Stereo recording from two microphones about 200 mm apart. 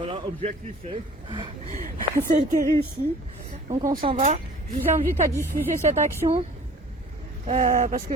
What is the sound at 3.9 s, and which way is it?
Speech, 25° right (ahead or behind).